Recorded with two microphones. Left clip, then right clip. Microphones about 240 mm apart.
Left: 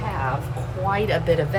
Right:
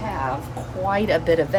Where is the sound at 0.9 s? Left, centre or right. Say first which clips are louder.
Right 2 dB; right.